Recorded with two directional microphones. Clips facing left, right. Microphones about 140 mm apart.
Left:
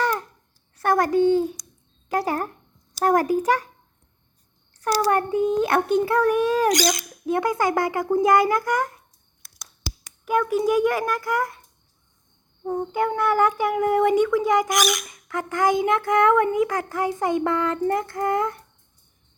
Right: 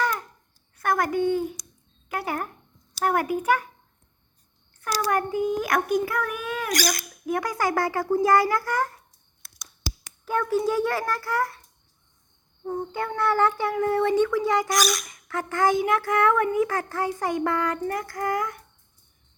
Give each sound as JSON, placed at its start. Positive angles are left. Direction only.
{"t": 0.8, "sound": "a child's voice", "side_deg": 30}
{"t": 4.8, "sound": "speech", "side_deg": 30}
{"t": 6.7, "sound": "speech", "side_deg": 20}
{"t": 10.2, "sound": "speech", "side_deg": 15}
{"t": 12.6, "sound": "speech", "side_deg": 15}